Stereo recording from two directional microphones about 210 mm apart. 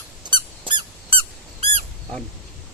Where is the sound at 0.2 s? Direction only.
20° right (ahead or behind).